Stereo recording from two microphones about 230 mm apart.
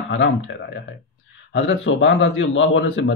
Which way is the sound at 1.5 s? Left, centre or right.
Left.